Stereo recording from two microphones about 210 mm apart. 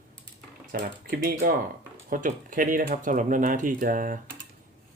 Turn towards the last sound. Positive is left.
turn(degrees=-40)  # may be behind; listen again after turning